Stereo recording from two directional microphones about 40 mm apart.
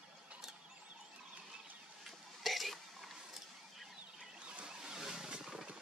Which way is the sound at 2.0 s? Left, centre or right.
Centre.